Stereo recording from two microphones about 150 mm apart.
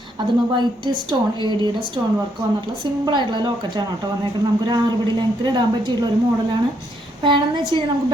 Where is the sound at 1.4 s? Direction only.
30° right (ahead or behind).